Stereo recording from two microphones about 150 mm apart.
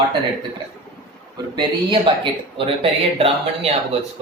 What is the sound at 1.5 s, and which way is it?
Speech, 35° right (ahead or behind).